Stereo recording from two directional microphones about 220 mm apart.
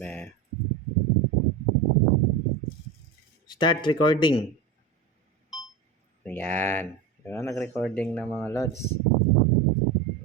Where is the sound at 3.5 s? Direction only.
20° left (ahead or behind).